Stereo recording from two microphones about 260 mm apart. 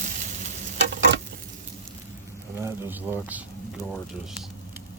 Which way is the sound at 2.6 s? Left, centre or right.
Centre.